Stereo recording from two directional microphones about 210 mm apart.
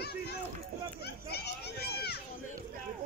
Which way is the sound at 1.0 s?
50° left (ahead or behind).